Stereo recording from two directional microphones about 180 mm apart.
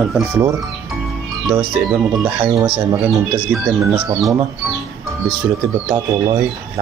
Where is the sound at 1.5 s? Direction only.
Centre (ahead or behind).